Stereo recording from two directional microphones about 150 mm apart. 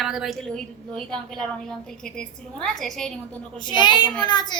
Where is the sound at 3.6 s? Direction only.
30° left (ahead or behind).